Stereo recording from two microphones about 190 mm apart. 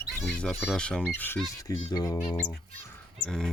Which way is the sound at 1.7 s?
20° left (ahead or behind).